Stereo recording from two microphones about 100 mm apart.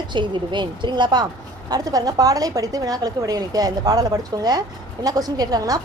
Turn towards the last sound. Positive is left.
turn(degrees=-40)  # may be behind; listen again after turning